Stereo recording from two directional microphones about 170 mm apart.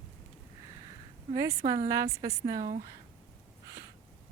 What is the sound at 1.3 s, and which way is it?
Speech, 20° right (ahead or behind).